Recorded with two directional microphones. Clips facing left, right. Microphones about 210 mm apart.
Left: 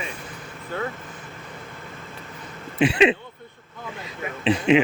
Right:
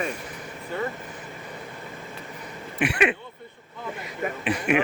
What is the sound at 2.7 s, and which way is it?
Speech, 25° left (ahead or behind).